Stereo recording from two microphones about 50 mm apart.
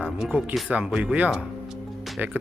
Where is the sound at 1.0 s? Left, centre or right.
Right.